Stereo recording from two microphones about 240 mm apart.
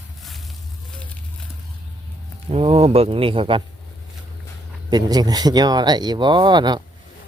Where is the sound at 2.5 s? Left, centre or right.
Right.